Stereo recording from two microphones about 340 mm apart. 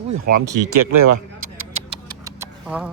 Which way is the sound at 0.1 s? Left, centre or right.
Right.